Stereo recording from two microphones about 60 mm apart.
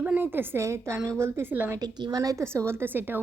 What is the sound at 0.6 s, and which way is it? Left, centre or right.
Speech, right.